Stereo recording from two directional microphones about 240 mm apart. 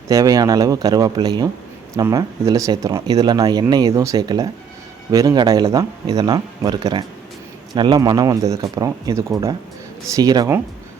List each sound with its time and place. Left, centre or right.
0.1 s speech: centre